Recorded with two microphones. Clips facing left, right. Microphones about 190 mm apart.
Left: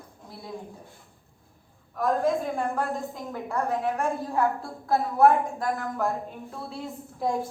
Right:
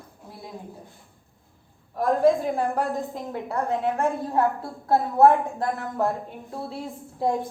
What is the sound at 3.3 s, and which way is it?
A woman's voice, 25° right (ahead or behind).